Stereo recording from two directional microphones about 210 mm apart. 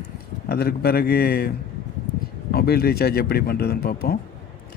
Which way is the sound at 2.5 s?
50° left (ahead or behind).